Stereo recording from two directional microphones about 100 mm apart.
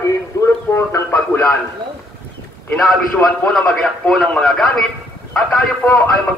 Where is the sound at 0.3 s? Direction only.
35° left (ahead or behind).